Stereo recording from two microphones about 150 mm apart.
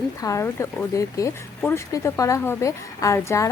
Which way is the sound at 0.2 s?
20° left (ahead or behind).